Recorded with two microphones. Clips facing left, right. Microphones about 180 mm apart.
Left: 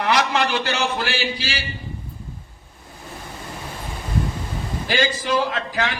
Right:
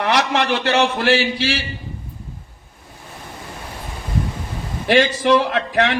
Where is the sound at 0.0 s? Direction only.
70° right (ahead or behind).